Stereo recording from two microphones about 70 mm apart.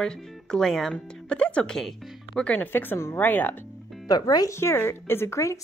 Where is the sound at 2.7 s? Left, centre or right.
Left.